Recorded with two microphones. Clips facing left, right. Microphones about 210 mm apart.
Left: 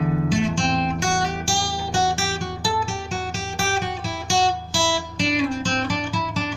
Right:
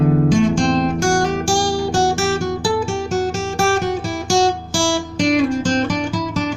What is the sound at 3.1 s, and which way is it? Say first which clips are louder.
Music: right 11 dB; 45° right (ahead or behind).